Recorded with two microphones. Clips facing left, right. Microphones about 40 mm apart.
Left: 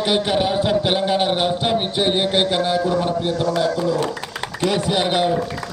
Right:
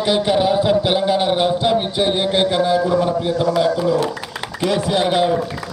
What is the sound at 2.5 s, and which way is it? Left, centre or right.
Speech, left.